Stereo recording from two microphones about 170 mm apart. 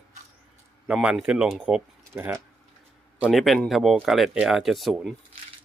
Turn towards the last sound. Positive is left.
turn(degrees=0)  # may be behind; listen again after turning